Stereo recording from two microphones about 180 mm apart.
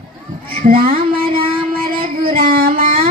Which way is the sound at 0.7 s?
50° right (ahead or behind).